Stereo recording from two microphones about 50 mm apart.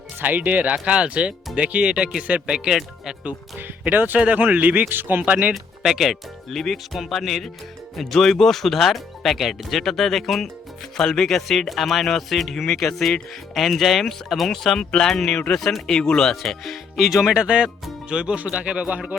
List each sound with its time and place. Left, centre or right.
0.2 s speech: right
2.6 s speech: centre
3.6 s a man's voice: right
5.8 s speech: centre
16.3 s speech: centre
17.3 s speech: centre